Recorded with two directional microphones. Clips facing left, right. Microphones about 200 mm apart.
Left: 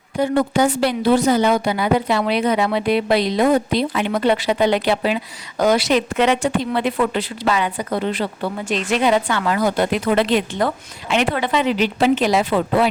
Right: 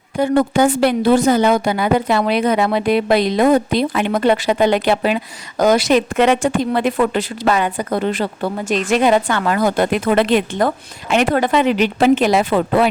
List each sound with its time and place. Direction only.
0.2 s a woman's voice: 55° right (ahead or behind)